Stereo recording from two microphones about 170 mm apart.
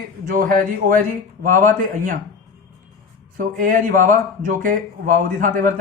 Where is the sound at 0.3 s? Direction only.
55° right (ahead or behind).